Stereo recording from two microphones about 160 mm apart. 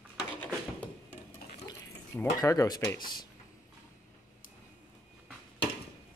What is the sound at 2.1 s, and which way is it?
Speech, 20° left (ahead or behind).